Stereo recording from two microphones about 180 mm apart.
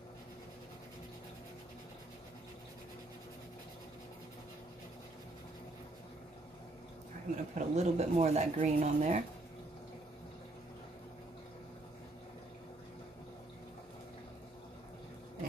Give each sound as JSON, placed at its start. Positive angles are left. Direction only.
{"t": 7.5, "sound": "speech", "side_deg": -40}